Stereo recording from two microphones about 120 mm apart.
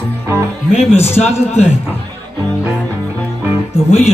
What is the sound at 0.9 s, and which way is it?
Speech, 60° left (ahead or behind).